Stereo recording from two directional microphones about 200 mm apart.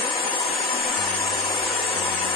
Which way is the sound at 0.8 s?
Centre (ahead or behind).